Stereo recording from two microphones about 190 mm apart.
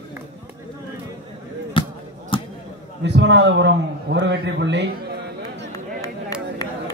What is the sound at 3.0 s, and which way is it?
A man's voice, 65° right (ahead or behind).